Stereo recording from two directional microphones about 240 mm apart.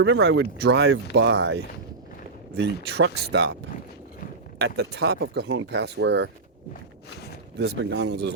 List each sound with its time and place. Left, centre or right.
0.0 s speech: right
4.5 s speech: right
7.6 s speech: right